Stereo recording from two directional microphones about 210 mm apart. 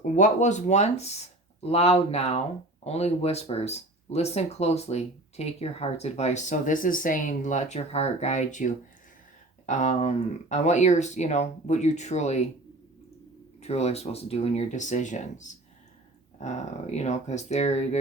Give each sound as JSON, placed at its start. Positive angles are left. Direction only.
{"t": 0.0, "sound": "speech", "side_deg": 35}
{"t": 13.6, "sound": "speech", "side_deg": 30}